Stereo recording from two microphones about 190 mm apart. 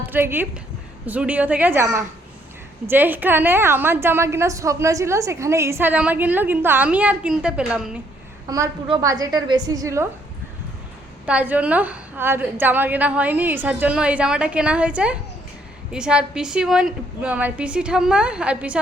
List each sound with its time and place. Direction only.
0.1 s a woman's voice: 10° right (ahead or behind)
8.4 s a woman's voice: 15° right (ahead or behind)
11.3 s a woman's voice: 5° right (ahead or behind)